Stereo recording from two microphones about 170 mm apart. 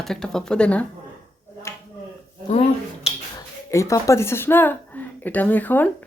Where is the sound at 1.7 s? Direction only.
15° left (ahead or behind).